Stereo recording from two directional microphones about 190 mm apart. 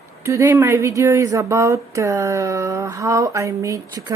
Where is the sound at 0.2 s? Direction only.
15° right (ahead or behind).